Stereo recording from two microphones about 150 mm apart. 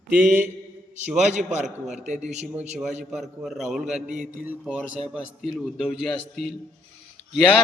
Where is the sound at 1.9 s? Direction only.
55° right (ahead or behind).